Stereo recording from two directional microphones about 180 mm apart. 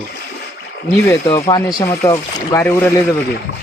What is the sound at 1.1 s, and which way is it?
Speech, 15° left (ahead or behind).